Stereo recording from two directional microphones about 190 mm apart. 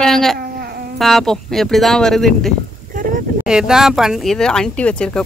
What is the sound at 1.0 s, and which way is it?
A woman's voice, centre (ahead or behind).